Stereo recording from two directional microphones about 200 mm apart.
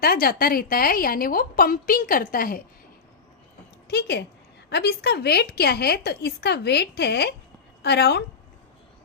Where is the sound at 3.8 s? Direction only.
55° left (ahead or behind).